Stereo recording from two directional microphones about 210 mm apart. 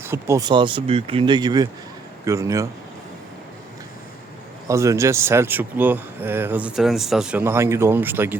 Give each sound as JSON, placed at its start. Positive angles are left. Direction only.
{"t": 0.0, "sound": "speech", "side_deg": -10}
{"t": 4.7, "sound": "speech", "side_deg": -15}